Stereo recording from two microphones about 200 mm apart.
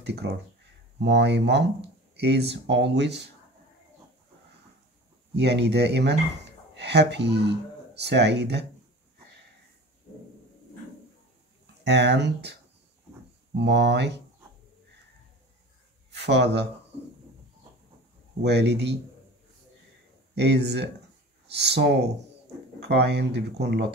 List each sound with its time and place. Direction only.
0.0 s speech: 60° right (ahead or behind)
5.3 s speech: 55° right (ahead or behind)
11.6 s speech: 60° right (ahead or behind)
13.6 s speech: 60° right (ahead or behind)
16.1 s speech: 60° right (ahead or behind)
18.4 s speech: 60° right (ahead or behind)
20.3 s speech: 55° right (ahead or behind)